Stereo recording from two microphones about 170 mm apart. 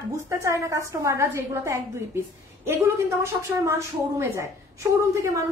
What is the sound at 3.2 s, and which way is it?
A woman's voice, 15° right (ahead or behind).